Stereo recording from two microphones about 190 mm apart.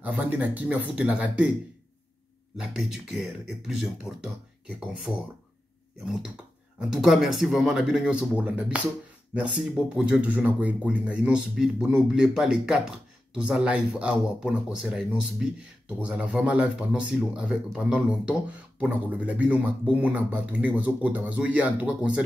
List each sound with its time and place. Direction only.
0.0 s speech: 10° right (ahead or behind)
2.5 s speech: 5° right (ahead or behind)
9.9 s speech: 5° right (ahead or behind)